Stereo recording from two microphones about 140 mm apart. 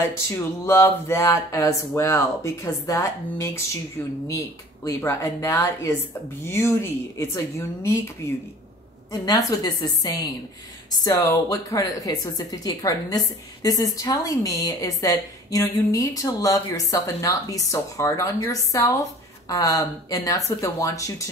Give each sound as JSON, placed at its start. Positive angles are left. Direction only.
{"t": 0.0, "sound": "a woman's voice", "side_deg": 20}
{"t": 4.8, "sound": "a woman's voice", "side_deg": 20}
{"t": 9.1, "sound": "a woman's voice", "side_deg": 25}